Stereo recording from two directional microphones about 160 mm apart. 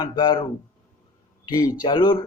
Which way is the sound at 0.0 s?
30° left (ahead or behind).